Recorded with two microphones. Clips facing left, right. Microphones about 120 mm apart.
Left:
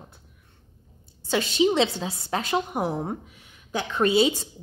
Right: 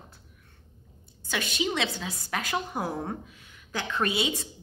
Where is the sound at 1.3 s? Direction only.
30° left (ahead or behind).